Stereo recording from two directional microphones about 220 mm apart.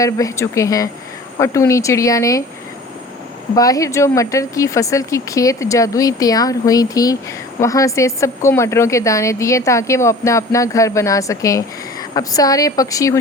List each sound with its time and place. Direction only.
0.0 s a woman's voice: 15° left (ahead or behind)
3.5 s a woman's voice: 15° left (ahead or behind)